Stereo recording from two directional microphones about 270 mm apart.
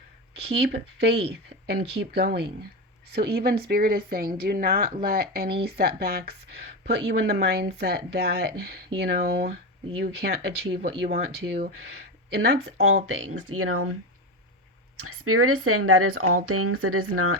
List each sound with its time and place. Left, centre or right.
0.3 s speech: right
13.2 s speech: right
14.9 s speech: right